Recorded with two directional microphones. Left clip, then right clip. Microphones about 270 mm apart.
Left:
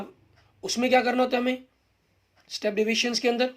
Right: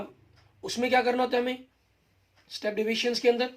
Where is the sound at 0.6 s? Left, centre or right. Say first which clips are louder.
Left 2 dB; left.